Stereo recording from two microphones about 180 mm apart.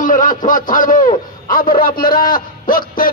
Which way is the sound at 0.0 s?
45° left (ahead or behind).